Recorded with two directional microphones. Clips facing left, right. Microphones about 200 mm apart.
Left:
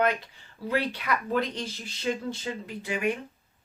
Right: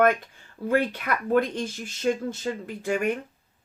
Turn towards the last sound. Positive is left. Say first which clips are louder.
# right 3 dB
turn(degrees=-50)  # may be behind; listen again after turning